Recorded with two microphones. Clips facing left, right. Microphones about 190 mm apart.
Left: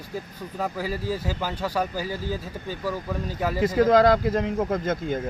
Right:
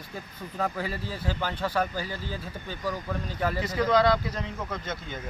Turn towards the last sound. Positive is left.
turn(degrees=45)  # may be behind; listen again after turning